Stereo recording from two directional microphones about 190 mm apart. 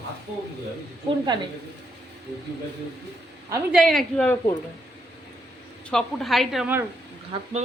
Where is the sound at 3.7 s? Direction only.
Centre (ahead or behind).